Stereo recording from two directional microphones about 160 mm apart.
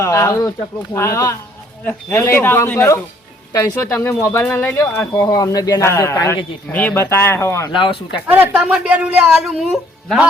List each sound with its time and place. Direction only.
0.0 s speech: 15° left (ahead or behind)
7.7 s speech: 30° left (ahead or behind)
8.3 s speech: 10° right (ahead or behind)